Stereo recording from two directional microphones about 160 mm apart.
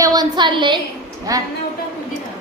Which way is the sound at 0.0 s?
25° right (ahead or behind).